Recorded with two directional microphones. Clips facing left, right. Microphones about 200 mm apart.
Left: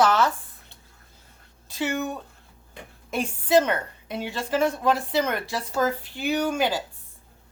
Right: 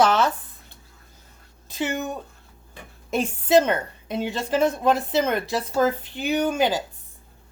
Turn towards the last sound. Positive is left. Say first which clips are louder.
# right 2 dB
turn(degrees=-20)  # may be behind; listen again after turning